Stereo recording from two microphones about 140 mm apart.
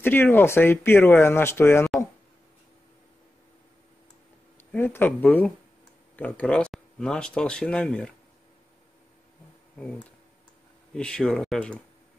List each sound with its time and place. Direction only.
0.0 s speech: 15° left (ahead or behind)
4.7 s speech: 15° left (ahead or behind)
11.0 s speech: 5° left (ahead or behind)